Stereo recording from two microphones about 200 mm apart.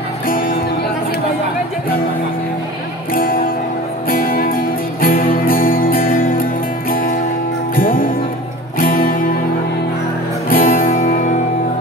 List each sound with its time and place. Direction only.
4.1 s music: 45° left (ahead or behind)
7.7 s music: 45° left (ahead or behind)
10.5 s music: 45° left (ahead or behind)